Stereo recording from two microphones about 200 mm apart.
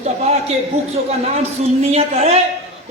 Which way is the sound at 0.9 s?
30° right (ahead or behind).